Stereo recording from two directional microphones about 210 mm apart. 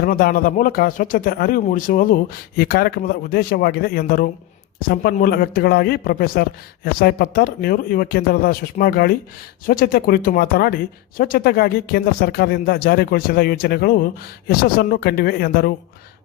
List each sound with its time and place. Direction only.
0.0 s speech: 45° left (ahead or behind)